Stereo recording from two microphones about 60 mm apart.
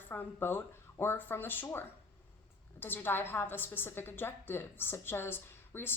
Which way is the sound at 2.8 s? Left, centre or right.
Left.